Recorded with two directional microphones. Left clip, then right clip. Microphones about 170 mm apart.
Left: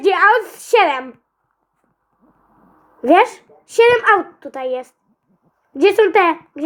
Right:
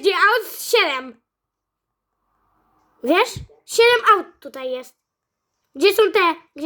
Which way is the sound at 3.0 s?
50° right (ahead or behind).